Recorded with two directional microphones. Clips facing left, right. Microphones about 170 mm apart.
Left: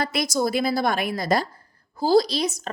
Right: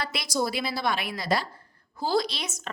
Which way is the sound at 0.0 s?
45° left (ahead or behind).